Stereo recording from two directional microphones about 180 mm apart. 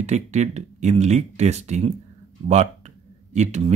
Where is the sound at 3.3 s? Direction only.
40° right (ahead or behind).